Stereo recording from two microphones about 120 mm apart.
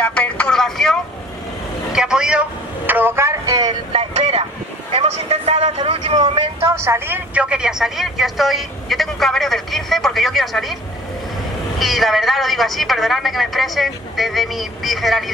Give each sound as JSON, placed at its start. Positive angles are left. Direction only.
{"t": 0.0, "sound": "speech", "side_deg": 10}
{"t": 2.9, "sound": "speech", "side_deg": -20}
{"t": 3.9, "sound": "speech", "side_deg": -55}
{"t": 6.0, "sound": "speech", "side_deg": -40}
{"t": 6.3, "sound": "speech", "side_deg": -55}
{"t": 6.7, "sound": "speech", "side_deg": -20}
{"t": 7.3, "sound": "speech", "side_deg": -5}
{"t": 11.8, "sound": "speech", "side_deg": 0}